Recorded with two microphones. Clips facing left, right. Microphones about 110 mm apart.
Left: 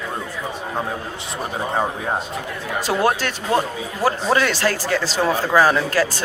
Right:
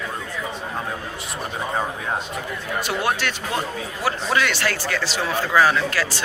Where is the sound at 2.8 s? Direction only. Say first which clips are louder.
Left 5 dB; 40° left (ahead or behind).